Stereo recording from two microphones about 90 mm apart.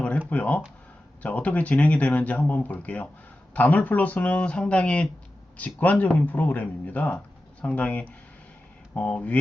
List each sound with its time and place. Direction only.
0.3 s speech: 15° left (ahead or behind)